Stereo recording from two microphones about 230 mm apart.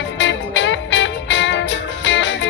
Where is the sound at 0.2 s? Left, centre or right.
Left.